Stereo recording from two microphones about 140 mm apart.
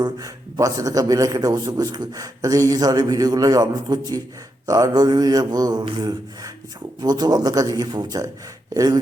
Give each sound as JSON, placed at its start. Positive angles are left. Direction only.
{"t": 0.0, "sound": "a man's voice", "side_deg": -25}